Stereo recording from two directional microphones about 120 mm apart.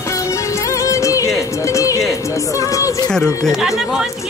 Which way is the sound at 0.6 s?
25° left (ahead or behind).